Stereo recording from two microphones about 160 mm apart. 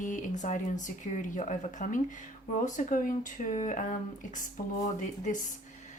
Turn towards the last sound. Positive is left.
turn(degrees=55)  # may be behind; listen again after turning